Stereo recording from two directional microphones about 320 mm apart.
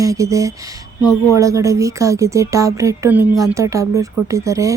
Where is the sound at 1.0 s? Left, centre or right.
Centre.